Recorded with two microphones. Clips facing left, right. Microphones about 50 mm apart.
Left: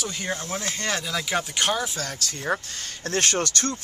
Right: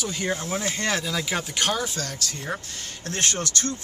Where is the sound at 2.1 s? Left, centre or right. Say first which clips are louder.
Left 4 dB; left.